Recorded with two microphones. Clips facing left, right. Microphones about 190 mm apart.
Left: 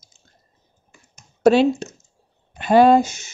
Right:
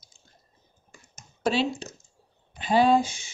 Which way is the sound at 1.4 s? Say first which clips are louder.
Left 11 dB; 45° left (ahead or behind).